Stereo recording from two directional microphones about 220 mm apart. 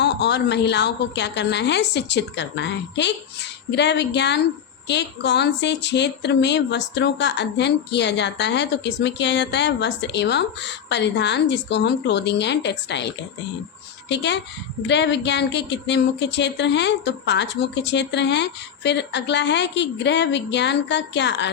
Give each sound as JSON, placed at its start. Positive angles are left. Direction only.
{"t": 0.0, "sound": "speech", "side_deg": 50}